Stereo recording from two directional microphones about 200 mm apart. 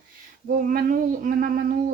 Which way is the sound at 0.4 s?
45° right (ahead or behind).